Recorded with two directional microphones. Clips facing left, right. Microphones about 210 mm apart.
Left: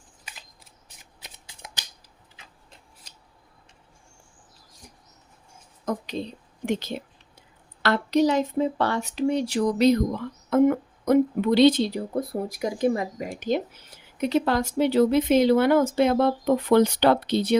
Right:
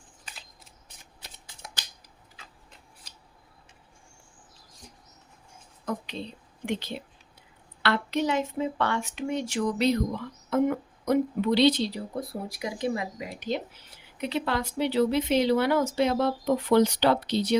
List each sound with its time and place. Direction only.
1.2 s shuffling cards: 15° left (ahead or behind)
5.8 s a woman's voice: 40° left (ahead or behind)